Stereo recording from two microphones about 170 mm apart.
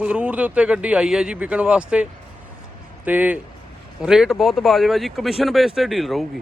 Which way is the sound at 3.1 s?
10° right (ahead or behind).